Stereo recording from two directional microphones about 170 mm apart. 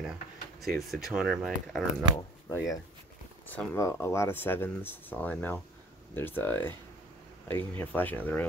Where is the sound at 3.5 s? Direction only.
15° left (ahead or behind).